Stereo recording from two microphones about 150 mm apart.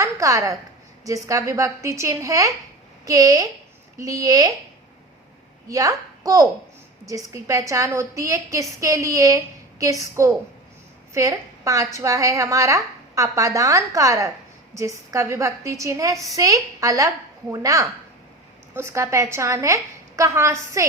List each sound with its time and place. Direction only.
0.0 s a sound: 20° right (ahead or behind)
1.0 s a woman's voice: 20° right (ahead or behind)
5.6 s a woman's voice: 25° right (ahead or behind)